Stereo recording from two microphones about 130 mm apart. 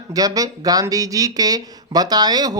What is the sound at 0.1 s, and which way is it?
Speech, 30° right (ahead or behind).